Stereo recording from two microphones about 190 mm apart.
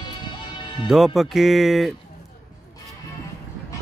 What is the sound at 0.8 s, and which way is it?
Speech, centre (ahead or behind).